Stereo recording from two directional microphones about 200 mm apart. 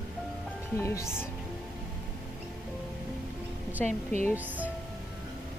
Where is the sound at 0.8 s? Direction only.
15° left (ahead or behind).